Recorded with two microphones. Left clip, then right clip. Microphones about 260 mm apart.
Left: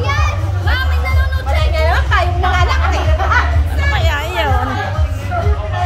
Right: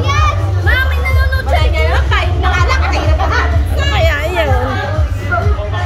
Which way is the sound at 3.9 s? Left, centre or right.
Centre.